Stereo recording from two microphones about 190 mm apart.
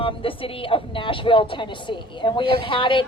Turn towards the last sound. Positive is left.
turn(degrees=25)  # may be behind; listen again after turning